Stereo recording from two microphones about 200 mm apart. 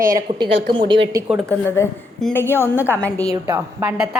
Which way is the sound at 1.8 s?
15° left (ahead or behind).